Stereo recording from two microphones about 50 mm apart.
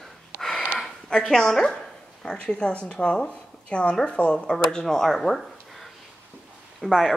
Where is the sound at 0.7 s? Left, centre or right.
Centre.